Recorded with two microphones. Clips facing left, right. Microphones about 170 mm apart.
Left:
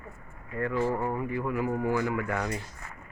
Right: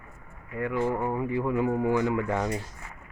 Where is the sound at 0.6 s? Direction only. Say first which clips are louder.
Right 1 dB; 15° right (ahead or behind).